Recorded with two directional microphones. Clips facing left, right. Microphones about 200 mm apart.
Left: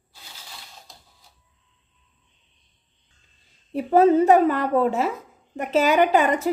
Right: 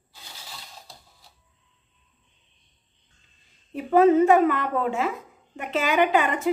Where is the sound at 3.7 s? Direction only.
35° left (ahead or behind).